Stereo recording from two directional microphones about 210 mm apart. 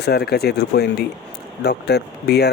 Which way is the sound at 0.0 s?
50° left (ahead or behind).